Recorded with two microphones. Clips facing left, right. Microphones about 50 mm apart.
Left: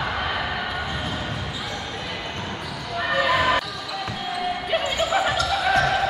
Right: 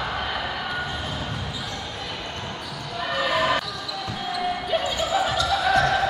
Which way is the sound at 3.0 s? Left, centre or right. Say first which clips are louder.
Left 3 dB; left.